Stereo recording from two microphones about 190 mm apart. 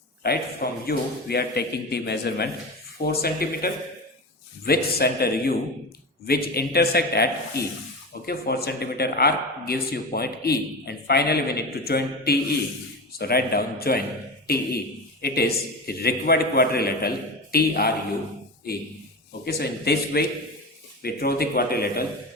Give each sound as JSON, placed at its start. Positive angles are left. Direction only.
{"t": 0.2, "sound": "speech", "side_deg": 55}
{"t": 15.2, "sound": "speech", "side_deg": 55}
{"t": 19.5, "sound": "speech", "side_deg": 55}